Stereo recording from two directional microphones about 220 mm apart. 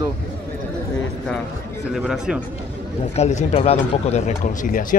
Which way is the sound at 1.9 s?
5° right (ahead or behind).